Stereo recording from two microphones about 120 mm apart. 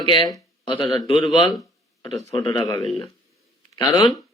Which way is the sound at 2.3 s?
30° left (ahead or behind).